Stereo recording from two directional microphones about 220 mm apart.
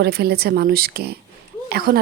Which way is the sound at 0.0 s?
45° right (ahead or behind).